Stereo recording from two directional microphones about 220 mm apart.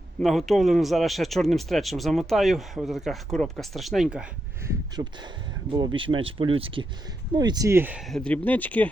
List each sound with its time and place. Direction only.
0.2 s speech: centre (ahead or behind)
5.0 s speech: 25° right (ahead or behind); by 8.9 s 5° left (ahead or behind)